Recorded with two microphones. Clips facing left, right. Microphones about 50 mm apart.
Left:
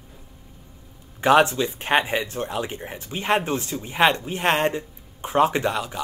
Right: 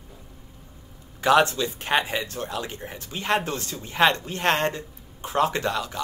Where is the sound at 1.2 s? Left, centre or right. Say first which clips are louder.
Left 2 dB; left.